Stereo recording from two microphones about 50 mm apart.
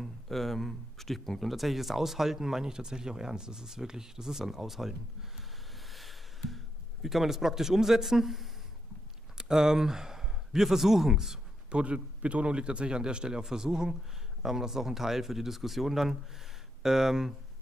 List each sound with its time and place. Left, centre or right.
0.0 s speech: centre
5.9 s a sound: centre
9.4 s speech: centre
11.7 s a man's voice: right; by 17.3 s centre